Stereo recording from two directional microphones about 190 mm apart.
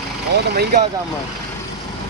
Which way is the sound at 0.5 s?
55° right (ahead or behind).